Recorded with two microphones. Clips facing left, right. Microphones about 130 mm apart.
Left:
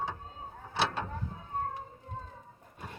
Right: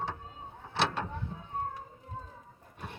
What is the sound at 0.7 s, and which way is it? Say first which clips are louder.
Vehicle: right 1 dB; 5° left (ahead or behind).